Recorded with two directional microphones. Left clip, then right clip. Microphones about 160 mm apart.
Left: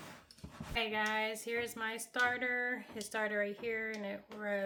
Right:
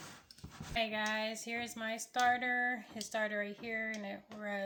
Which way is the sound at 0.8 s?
45° left (ahead or behind).